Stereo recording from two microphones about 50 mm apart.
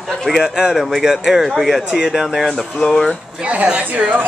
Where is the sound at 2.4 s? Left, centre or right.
Centre.